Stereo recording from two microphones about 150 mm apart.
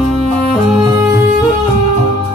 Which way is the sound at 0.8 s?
15° right (ahead or behind).